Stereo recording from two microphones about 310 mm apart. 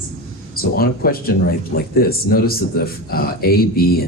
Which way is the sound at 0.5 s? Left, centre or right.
Left.